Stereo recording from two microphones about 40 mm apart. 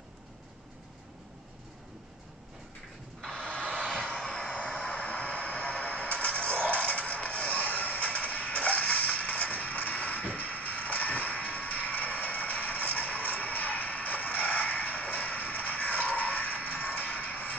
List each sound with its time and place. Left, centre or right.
3.3 s vehicle: left
5.2 s music: left